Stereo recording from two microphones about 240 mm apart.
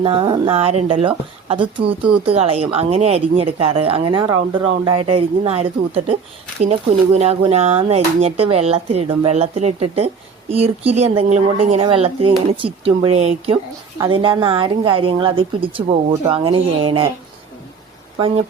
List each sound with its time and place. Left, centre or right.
0.0 s speech: right